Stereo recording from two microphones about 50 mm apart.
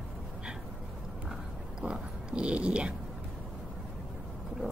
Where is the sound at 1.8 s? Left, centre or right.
Centre.